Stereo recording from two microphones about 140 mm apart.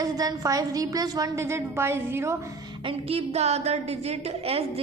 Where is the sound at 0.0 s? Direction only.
25° right (ahead or behind).